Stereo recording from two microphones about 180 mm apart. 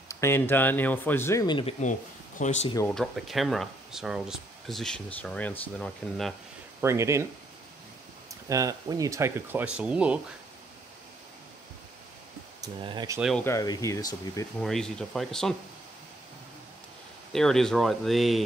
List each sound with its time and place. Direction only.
0.1 s speech: 15° left (ahead or behind)
1.8 s speech: 45° left (ahead or behind)
2.9 s speech: centre (ahead or behind)
6.8 s speech: 15° right (ahead or behind)
8.5 s speech: 20° right (ahead or behind)
12.6 s speech: 25° right (ahead or behind)
13.4 s speech: 15° left (ahead or behind)
14.6 s speech: 5° left (ahead or behind)
17.3 s speech: centre (ahead or behind)